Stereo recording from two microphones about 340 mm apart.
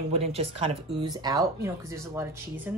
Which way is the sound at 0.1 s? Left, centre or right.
Centre.